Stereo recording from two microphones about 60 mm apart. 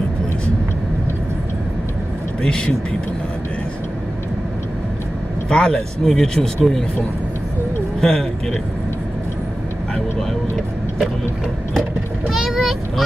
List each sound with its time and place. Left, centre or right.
2.4 s speech: centre
5.5 s speech: centre
8.0 s speech: centre
12.3 s vehicle: centre